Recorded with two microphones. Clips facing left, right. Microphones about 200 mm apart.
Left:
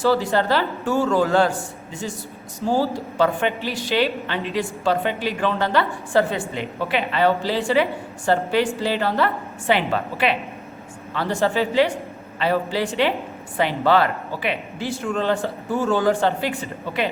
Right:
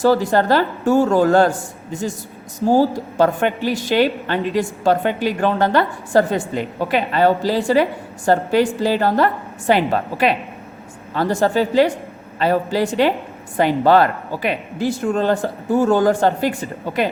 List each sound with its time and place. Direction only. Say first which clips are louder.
0.0 s a woman's voice: right 4 dB; 45° right (ahead or behind)